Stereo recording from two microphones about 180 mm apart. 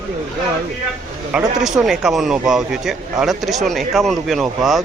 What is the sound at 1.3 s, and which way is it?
A man's voice, 5° right (ahead or behind).